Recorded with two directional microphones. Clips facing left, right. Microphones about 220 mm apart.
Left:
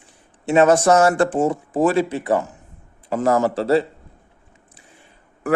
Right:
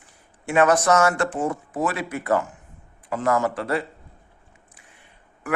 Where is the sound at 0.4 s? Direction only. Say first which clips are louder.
Left 4 dB; 25° left (ahead or behind).